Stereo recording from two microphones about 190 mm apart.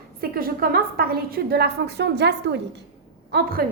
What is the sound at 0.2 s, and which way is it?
A woman's voice, 50° right (ahead or behind).